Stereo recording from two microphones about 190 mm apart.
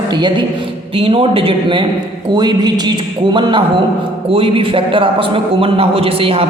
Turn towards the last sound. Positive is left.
turn(degrees=-30)  # may be behind; listen again after turning